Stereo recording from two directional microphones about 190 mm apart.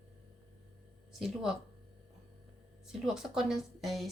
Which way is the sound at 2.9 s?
5° right (ahead or behind).